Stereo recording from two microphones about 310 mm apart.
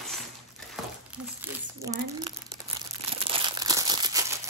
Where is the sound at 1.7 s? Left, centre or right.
Centre.